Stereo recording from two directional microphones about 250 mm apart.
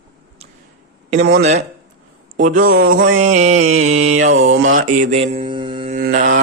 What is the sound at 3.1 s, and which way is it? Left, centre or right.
Speech, right.